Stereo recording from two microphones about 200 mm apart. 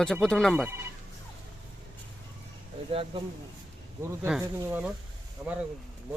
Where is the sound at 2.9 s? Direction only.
25° right (ahead or behind).